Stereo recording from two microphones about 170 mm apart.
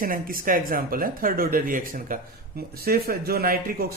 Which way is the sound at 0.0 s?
55° right (ahead or behind).